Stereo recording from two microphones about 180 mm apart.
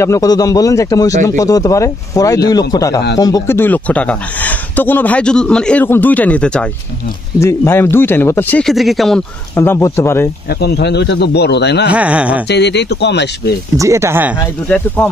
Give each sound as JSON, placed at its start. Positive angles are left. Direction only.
{"t": 0.0, "sound": "a man's voice", "side_deg": 20}
{"t": 9.6, "sound": "speech", "side_deg": 15}
{"t": 10.5, "sound": "speech", "side_deg": 65}
{"t": 11.9, "sound": "speech", "side_deg": -5}
{"t": 12.4, "sound": "speech", "side_deg": 70}
{"t": 13.7, "sound": "speech", "side_deg": -15}
{"t": 15.0, "sound": "speech", "side_deg": 5}